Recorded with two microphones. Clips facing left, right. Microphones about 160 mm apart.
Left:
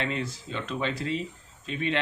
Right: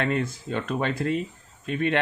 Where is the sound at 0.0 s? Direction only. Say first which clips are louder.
Right 5 dB; 50° right (ahead or behind).